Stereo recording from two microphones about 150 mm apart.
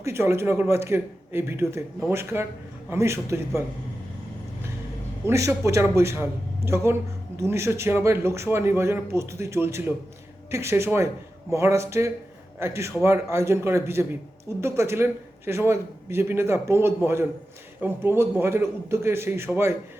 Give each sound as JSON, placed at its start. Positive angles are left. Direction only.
{"t": 0.0, "sound": "a man's voice", "side_deg": -15}
{"t": 5.2, "sound": "a man's voice", "side_deg": -20}